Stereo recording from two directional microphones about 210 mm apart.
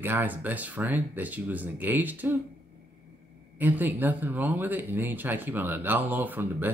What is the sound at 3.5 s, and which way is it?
Speech, 10° right (ahead or behind).